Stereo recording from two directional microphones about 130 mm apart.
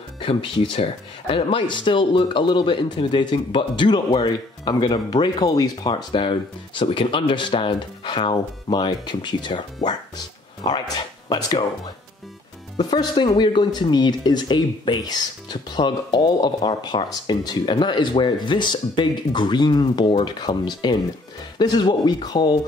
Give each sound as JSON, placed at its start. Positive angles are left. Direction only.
{"t": 0.2, "sound": "speech", "side_deg": 45}
{"t": 12.7, "sound": "speech", "side_deg": 35}